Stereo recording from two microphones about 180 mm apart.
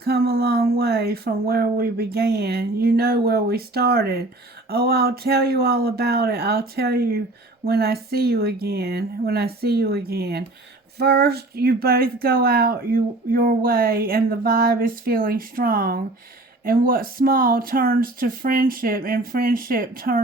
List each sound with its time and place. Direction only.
0.0 s speech: 60° right (ahead or behind)